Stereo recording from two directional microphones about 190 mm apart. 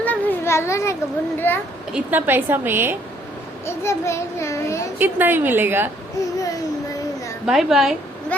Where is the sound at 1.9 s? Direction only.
10° right (ahead or behind).